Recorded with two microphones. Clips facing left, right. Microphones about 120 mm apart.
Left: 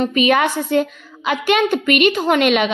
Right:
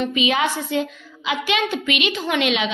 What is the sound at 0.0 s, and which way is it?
A woman's voice, 50° left (ahead or behind).